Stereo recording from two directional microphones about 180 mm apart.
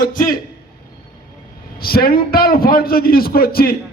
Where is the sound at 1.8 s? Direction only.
55° left (ahead or behind).